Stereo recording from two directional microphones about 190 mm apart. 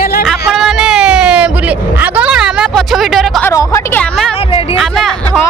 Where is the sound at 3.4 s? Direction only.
15° left (ahead or behind).